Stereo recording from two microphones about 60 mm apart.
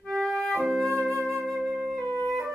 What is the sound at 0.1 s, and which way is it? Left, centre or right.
Music, centre.